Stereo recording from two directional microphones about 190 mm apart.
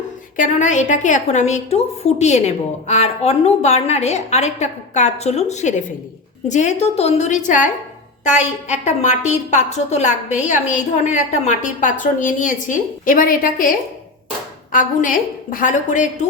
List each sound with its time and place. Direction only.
0.3 s a woman's voice: 40° left (ahead or behind)